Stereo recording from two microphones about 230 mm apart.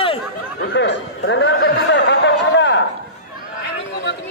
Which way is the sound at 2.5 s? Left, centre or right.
Left.